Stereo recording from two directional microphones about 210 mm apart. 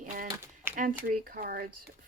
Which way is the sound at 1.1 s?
45° right (ahead or behind).